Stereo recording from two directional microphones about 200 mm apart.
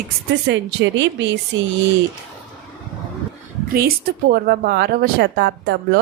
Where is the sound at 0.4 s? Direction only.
65° right (ahead or behind).